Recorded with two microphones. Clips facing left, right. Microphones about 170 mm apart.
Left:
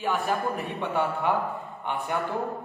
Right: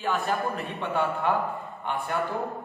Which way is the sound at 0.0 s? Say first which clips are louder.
Even; 15° left (ahead or behind).